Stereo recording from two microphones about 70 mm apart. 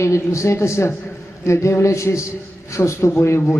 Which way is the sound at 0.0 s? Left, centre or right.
Left.